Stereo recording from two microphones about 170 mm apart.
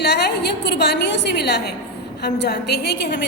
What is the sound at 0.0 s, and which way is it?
A woman's voice, 75° left (ahead or behind).